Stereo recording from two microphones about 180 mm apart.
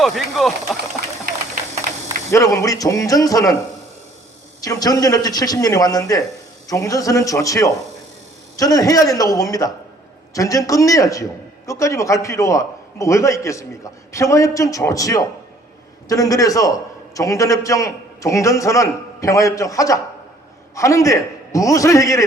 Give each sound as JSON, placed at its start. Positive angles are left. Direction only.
{"t": 0.0, "sound": "speech", "side_deg": 0}
{"t": 2.3, "sound": "a man's voice", "side_deg": 15}
{"t": 4.6, "sound": "a man's voice", "side_deg": 20}